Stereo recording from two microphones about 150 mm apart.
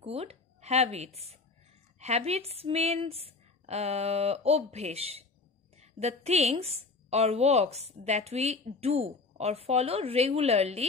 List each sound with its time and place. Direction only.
0.0 s a woman's voice: 40° right (ahead or behind)